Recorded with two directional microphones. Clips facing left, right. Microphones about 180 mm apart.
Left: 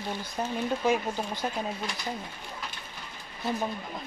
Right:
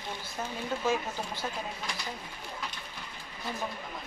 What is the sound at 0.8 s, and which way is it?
Speech, 15° left (ahead or behind).